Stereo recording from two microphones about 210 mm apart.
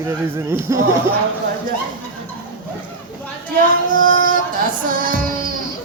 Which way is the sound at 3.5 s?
40° right (ahead or behind).